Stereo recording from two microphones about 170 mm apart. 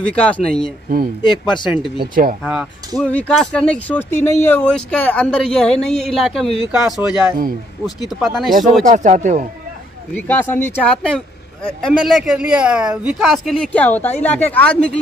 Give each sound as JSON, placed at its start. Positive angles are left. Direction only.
{"t": 0.1, "sound": "speech", "side_deg": 5}
{"t": 1.2, "sound": "speech", "side_deg": 25}
{"t": 2.0, "sound": "speech", "side_deg": -55}
{"t": 2.4, "sound": "speech", "side_deg": -5}
{"t": 3.0, "sound": "speech", "side_deg": 10}
{"t": 8.8, "sound": "speech", "side_deg": -45}
{"t": 10.1, "sound": "speech", "side_deg": 10}